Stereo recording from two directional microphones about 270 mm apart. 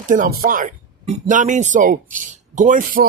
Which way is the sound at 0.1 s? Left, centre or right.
Right.